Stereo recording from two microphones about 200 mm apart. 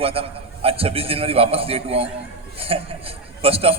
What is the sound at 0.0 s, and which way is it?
A man's voice, 30° right (ahead or behind).